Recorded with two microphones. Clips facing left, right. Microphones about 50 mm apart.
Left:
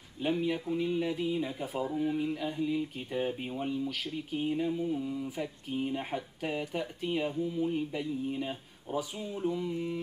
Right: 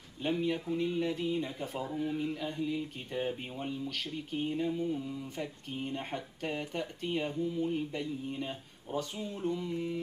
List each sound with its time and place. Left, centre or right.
0.2 s speech: centre